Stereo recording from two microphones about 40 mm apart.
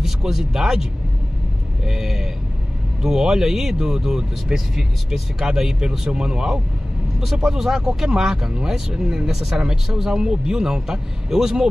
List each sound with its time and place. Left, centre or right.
0.0 s speech: centre
1.9 s speech: centre